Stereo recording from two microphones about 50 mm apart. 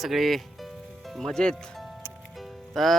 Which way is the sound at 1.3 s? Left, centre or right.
Centre.